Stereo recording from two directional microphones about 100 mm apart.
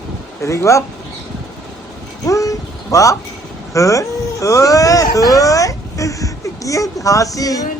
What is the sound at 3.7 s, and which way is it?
Speech, 35° left (ahead or behind).